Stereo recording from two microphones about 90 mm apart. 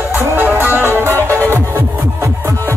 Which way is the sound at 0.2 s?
25° right (ahead or behind).